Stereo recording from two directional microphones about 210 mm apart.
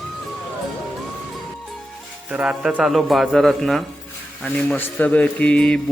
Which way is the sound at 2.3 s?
5° right (ahead or behind).